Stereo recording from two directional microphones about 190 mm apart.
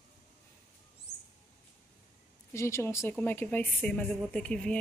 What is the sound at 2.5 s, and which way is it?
Speech, 15° left (ahead or behind).